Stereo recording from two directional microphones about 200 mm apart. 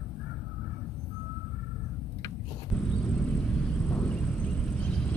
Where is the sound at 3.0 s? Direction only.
5° left (ahead or behind).